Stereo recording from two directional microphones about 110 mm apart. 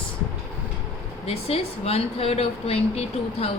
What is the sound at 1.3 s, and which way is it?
A woman's voice, 65° left (ahead or behind).